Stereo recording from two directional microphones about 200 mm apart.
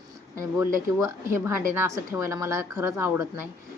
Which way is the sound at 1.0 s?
10° right (ahead or behind).